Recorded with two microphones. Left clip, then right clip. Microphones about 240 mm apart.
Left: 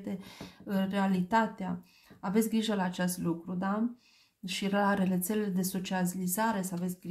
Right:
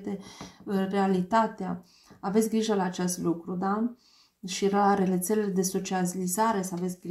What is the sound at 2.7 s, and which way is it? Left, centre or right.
Speech, left.